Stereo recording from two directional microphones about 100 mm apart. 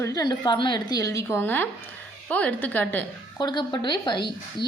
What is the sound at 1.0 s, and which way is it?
Speech, 35° left (ahead or behind).